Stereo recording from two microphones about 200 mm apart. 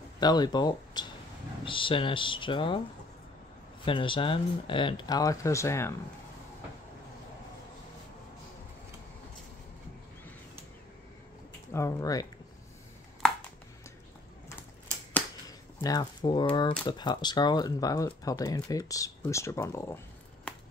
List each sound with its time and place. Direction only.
0.2 s speech: 20° left (ahead or behind)
3.8 s speech: 25° left (ahead or behind)
11.7 s speech: 15° left (ahead or behind)
15.8 s speech: 20° left (ahead or behind)